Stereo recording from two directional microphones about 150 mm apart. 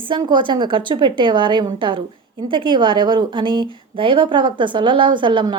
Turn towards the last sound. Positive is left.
turn(degrees=-30)  # may be behind; listen again after turning